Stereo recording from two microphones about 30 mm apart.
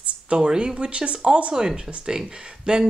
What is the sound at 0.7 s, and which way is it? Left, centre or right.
Speech, right.